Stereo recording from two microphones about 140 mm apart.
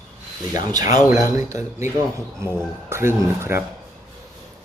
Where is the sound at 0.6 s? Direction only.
25° right (ahead or behind).